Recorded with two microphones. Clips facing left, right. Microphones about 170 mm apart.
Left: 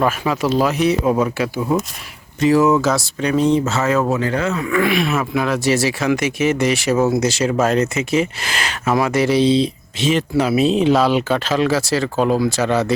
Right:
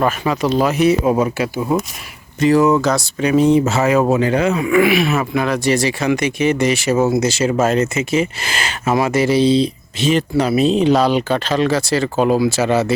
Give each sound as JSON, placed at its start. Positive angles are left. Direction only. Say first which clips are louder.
{"t": 0.0, "sound": "speech", "louder": "right 1 dB", "side_deg": 0}
{"t": 2.4, "sound": "speech", "louder": "right 1 dB", "side_deg": 0}